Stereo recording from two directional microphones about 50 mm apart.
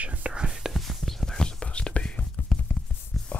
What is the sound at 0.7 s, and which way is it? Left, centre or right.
Whispering, centre.